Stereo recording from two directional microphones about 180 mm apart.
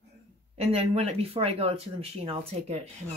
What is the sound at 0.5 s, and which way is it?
Speech, 35° right (ahead or behind).